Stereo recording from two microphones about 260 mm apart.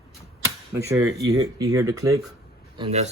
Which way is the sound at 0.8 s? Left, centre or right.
Centre.